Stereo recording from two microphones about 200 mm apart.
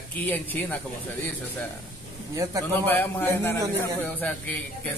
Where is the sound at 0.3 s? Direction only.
10° left (ahead or behind).